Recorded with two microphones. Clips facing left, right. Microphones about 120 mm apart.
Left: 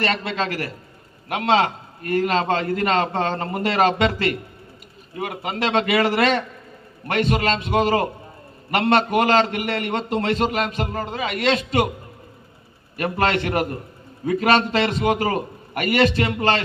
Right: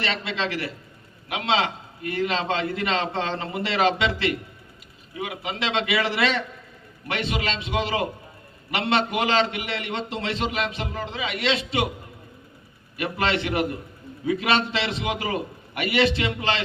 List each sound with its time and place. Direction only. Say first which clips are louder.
0.0 s a man's voice: left 4 dB; 50° left (ahead or behind)
13.0 s a man's voice: left 4 dB; 45° left (ahead or behind)